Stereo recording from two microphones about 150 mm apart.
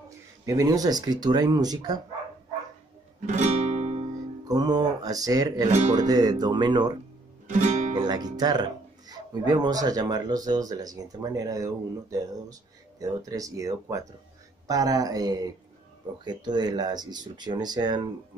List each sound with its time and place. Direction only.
0.5 s speech: 25° right (ahead or behind)
3.2 s music: 50° right (ahead or behind)
4.5 s speech: 25° right (ahead or behind)
5.7 s speech: 50° right (ahead or behind)
6.0 s speech: 25° right (ahead or behind)
7.4 s music: 55° right (ahead or behind)
7.9 s music: 25° right (ahead or behind)
9.1 s speech: 25° right (ahead or behind)